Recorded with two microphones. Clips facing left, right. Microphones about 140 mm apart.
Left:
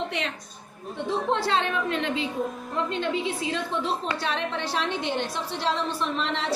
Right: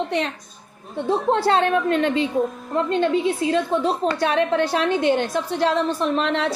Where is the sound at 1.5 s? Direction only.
50° right (ahead or behind).